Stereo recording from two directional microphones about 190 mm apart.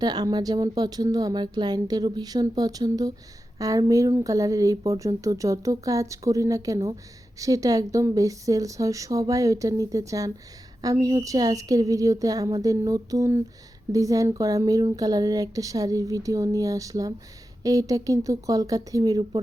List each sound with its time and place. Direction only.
0.0 s speech: 20° right (ahead or behind)